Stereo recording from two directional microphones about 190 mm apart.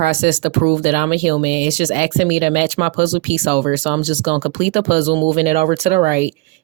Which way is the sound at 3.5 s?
35° right (ahead or behind).